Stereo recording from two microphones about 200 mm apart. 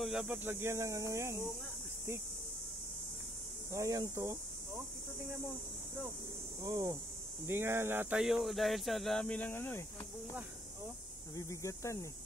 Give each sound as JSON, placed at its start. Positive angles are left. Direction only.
{"t": 0.0, "sound": "speech", "side_deg": -5}
{"t": 3.7, "sound": "speech", "side_deg": -15}
{"t": 6.6, "sound": "speech", "side_deg": -15}
{"t": 11.3, "sound": "speech", "side_deg": 15}